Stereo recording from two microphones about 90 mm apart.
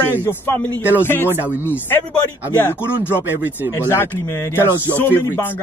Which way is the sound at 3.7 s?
30° left (ahead or behind).